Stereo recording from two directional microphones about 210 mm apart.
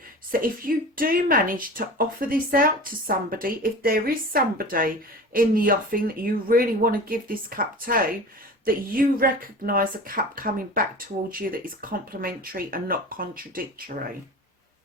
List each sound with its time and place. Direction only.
0.3 s speech: 45° right (ahead or behind)